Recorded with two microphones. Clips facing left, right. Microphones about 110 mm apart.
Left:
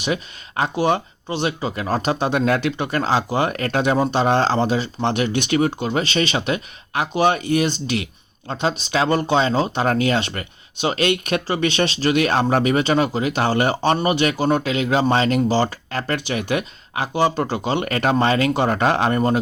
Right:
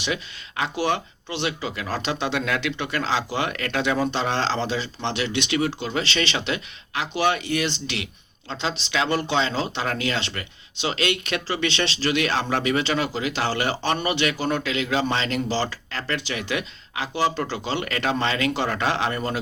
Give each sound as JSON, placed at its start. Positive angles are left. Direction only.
{"t": 0.0, "sound": "speech", "side_deg": 35}